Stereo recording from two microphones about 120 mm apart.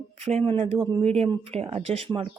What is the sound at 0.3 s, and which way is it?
Speech, 60° right (ahead or behind).